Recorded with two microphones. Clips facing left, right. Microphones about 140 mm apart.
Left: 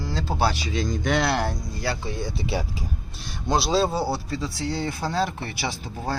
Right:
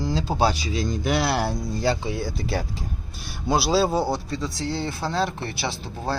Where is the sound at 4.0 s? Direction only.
5° left (ahead or behind).